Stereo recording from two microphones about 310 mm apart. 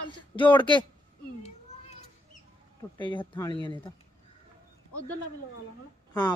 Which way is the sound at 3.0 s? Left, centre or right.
Centre.